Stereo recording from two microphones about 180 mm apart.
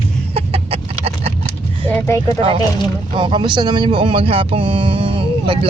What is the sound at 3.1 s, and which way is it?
Speech, 25° right (ahead or behind).